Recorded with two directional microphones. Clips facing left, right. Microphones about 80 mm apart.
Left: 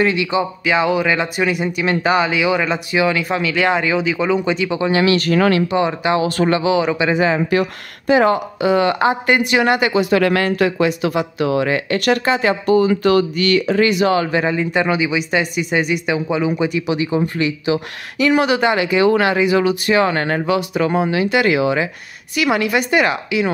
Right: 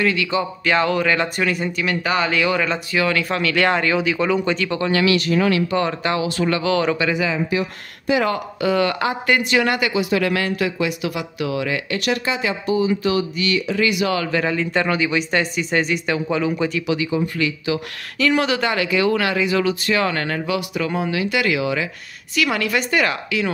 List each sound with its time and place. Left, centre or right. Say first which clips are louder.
0.0 s speech: left 3 dB; left
0.7 s speech: left 1 dB; centre
4.9 s speech: left 2 dB; left
5.2 s speech: left 3 dB; left
5.7 s speech: left 3 dB; centre
6.2 s speech: left 4 dB; left
6.5 s speech: left 3 dB; centre
7.2 s speech: left 5 dB; left
8.1 s speech: left 6 dB; left
10.0 s speech: left 5 dB; left; by 16.8 s centre
16.8 s speech: left 3 dB; left